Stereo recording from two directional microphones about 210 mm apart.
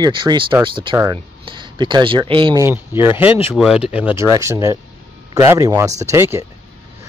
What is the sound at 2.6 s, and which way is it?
Speech, 10° right (ahead or behind).